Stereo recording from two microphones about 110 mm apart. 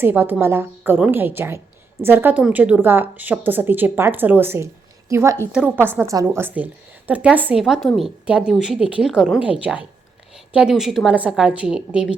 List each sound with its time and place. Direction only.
0.0 s a woman's voice: 20° right (ahead or behind)
5.5 s a woman's voice: 10° right (ahead or behind)
5.8 s a woman's voice: 10° left (ahead or behind)
6.1 s a woman's voice: 30° right (ahead or behind)
7.5 s a woman's voice: centre (ahead or behind)